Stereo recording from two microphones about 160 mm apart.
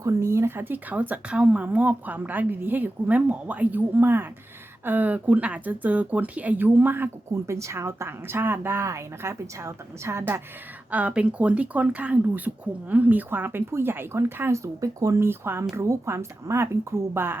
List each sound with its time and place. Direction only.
0.0 s speech: 20° right (ahead or behind)